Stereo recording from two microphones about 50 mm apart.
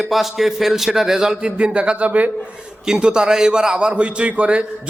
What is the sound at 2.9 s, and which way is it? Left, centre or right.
A man's voice, centre.